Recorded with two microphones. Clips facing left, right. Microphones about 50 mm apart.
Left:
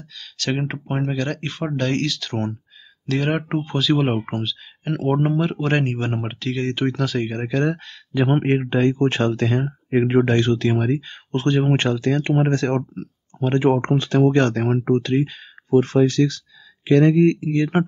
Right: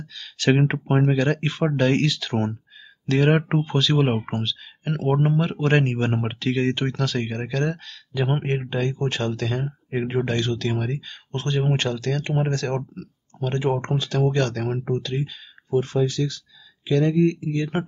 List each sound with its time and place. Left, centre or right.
0.4 s speech: centre; by 10.7 s left
10.7 s speech: left